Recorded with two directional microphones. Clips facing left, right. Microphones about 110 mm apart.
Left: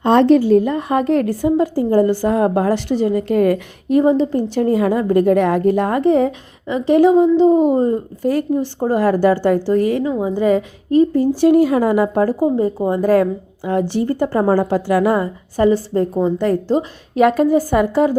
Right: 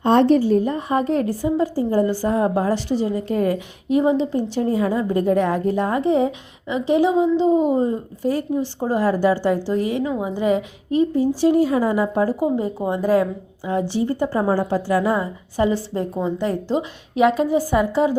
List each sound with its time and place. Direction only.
0.0 s a woman's voice: 90° left; by 10.0 s 50° left (ahead or behind)
10.0 s a woman's voice: 15° right (ahead or behind)
10.3 s a woman's voice: 40° left (ahead or behind)
11.3 s a woman's voice: 65° left (ahead or behind)
12.4 s a woman's voice: 35° left (ahead or behind)
13.7 s a woman's voice: 60° left (ahead or behind)
14.5 s a woman's voice: 70° left (ahead or behind)
15.5 s a woman's voice: 45° left (ahead or behind)